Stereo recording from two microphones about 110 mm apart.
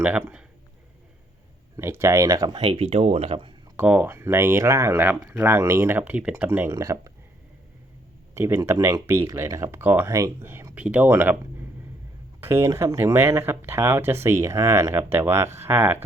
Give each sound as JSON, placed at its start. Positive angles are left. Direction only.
{"t": 0.0, "sound": "speech", "side_deg": -10}
{"t": 1.7, "sound": "speech", "side_deg": -25}
{"t": 2.6, "sound": "speech", "side_deg": -65}
{"t": 3.8, "sound": "speech", "side_deg": -15}
{"t": 8.4, "sound": "speech", "side_deg": -20}
{"t": 10.1, "sound": "speech", "side_deg": -30}
{"t": 12.4, "sound": "speech", "side_deg": -20}